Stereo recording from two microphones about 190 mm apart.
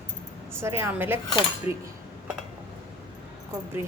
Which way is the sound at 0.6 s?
15° right (ahead or behind).